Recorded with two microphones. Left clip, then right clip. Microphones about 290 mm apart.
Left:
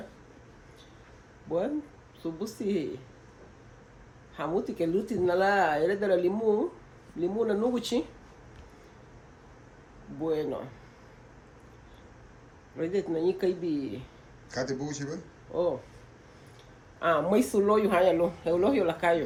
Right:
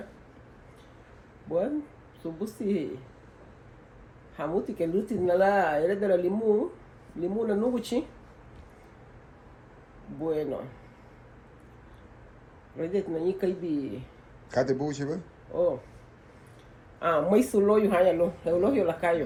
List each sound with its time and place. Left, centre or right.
1.5 s speech: centre
4.4 s speech: centre
10.2 s speech: centre
12.7 s speech: centre
14.5 s a man's voice: centre
17.0 s speech: centre